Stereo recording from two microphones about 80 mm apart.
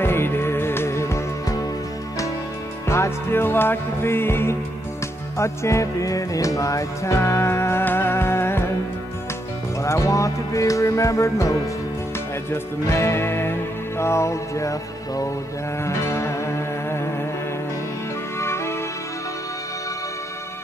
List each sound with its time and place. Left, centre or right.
0.0 s music: left
2.9 s music: left
9.8 s music: left
18.4 s music: left